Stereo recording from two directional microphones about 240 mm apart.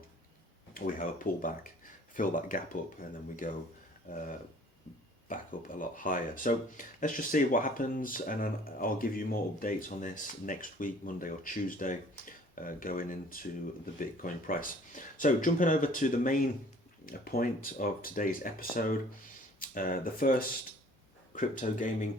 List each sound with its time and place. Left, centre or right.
0.7 s speech: left